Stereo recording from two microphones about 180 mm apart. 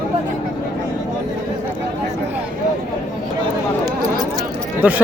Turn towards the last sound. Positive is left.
turn(degrees=-10)  # may be behind; listen again after turning